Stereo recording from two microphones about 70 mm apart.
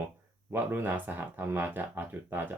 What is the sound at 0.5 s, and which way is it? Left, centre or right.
Speech, right.